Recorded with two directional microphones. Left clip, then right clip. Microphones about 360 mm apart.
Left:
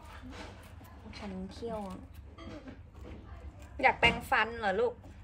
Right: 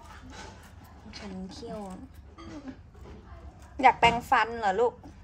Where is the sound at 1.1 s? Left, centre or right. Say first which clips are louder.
Right 2 dB; centre.